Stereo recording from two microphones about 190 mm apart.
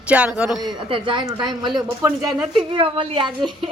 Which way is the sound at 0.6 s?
25° right (ahead or behind).